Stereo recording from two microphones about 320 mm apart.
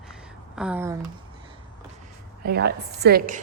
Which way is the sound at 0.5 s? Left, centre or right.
Centre.